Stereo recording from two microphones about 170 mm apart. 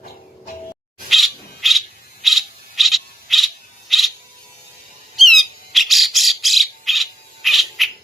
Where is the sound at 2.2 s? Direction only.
Centre (ahead or behind).